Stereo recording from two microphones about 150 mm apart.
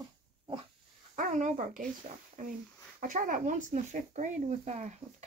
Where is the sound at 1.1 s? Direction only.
55° right (ahead or behind).